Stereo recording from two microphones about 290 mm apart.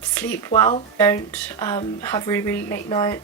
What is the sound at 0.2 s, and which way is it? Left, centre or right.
Speech, centre.